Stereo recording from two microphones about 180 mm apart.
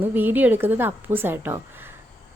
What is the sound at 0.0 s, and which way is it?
A woman's voice, 10° right (ahead or behind).